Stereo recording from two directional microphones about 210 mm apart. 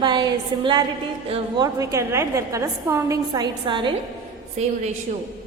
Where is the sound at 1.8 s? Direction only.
15° right (ahead or behind); by 4.7 s 30° right (ahead or behind).